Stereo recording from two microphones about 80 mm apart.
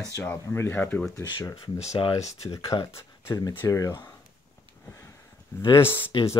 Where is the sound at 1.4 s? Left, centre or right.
Left.